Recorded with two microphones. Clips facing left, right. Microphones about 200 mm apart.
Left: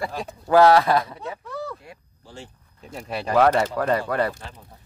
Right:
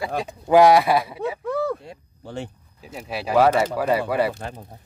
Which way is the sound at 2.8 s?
5° right (ahead or behind).